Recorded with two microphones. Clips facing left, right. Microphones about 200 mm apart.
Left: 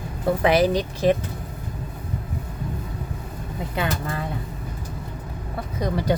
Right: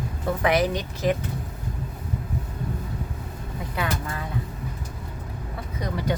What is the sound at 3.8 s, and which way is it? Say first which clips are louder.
Speech: left 3 dB; 25° left (ahead or behind).